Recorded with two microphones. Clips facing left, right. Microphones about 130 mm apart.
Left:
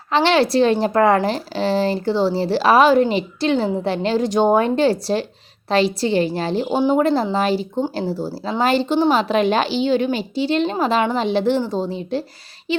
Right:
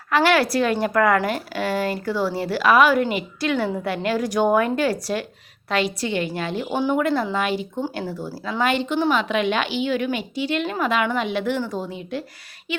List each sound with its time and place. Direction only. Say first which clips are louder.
0.1 s a woman's voice: left 2 dB; 25° left (ahead or behind)